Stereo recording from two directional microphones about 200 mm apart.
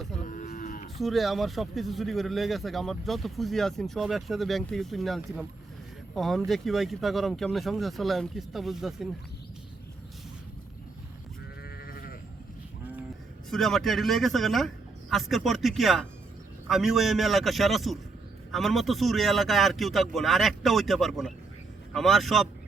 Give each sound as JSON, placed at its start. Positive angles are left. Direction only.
{"t": 0.2, "sound": "cattle", "side_deg": 45}
{"t": 0.9, "sound": "speech", "side_deg": 0}
{"t": 11.6, "sound": "sheep", "side_deg": 50}
{"t": 13.5, "sound": "speech", "side_deg": 0}